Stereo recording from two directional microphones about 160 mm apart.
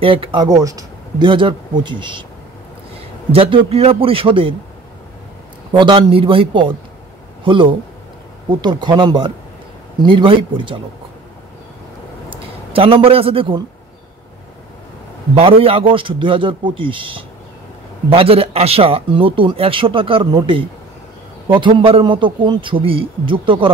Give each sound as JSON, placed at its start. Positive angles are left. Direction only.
{"t": 0.0, "sound": "speech", "side_deg": -35}
{"t": 3.3, "sound": "speech", "side_deg": -35}
{"t": 5.7, "sound": "speech", "side_deg": -30}
{"t": 12.3, "sound": "a man's voice", "side_deg": -35}
{"t": 15.3, "sound": "speech", "side_deg": -35}